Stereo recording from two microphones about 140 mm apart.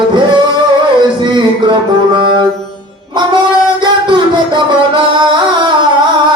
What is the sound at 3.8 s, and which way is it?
Music, 35° right (ahead or behind).